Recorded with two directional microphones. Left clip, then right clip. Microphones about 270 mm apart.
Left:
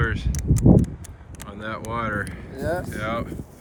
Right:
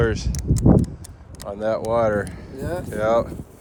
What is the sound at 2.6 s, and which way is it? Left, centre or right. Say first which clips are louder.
Speech: left 2 dB; centre.